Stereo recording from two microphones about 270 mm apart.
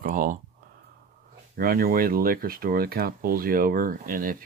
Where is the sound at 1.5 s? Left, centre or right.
Right.